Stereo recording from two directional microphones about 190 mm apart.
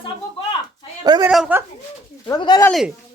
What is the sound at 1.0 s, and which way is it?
Speech, 20° right (ahead or behind).